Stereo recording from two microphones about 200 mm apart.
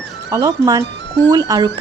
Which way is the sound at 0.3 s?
15° right (ahead or behind).